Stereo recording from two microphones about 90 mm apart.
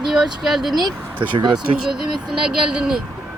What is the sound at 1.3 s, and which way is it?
Speech, 60° right (ahead or behind).